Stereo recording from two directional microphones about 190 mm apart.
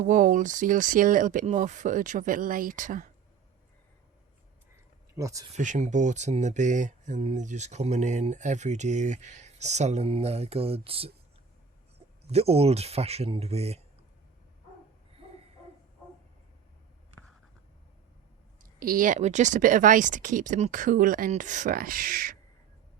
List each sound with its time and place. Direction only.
0.0 s speech: 40° right (ahead or behind)
5.1 s speech: 15° right (ahead or behind)
5.5 s speech: 40° right (ahead or behind)
12.3 s speech: 30° right (ahead or behind)
18.6 s speech: 50° right (ahead or behind)